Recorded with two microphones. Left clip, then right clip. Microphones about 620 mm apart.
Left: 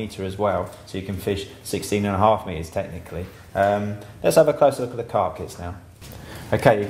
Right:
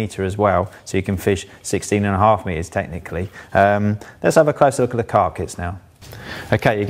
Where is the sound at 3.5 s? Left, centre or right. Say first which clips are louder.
Right 5 dB; right.